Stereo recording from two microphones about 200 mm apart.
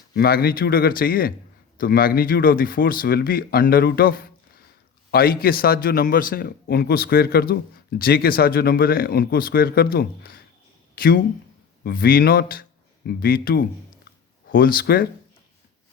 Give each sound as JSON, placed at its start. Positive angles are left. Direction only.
{"t": 0.1, "sound": "a man's voice", "side_deg": 50}